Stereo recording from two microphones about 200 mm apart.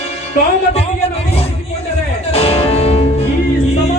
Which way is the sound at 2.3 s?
30° left (ahead or behind).